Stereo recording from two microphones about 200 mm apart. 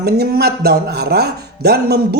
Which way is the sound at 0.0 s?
55° right (ahead or behind).